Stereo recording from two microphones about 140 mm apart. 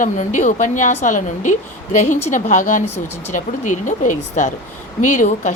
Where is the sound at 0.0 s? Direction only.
65° left (ahead or behind).